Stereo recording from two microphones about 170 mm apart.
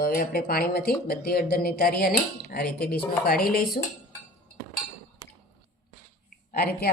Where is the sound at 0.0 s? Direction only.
60° left (ahead or behind).